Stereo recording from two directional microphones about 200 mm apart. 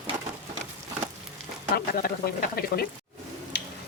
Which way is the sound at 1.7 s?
50° left (ahead or behind).